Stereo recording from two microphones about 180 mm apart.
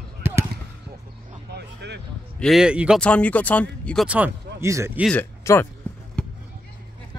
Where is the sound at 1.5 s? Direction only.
65° right (ahead or behind).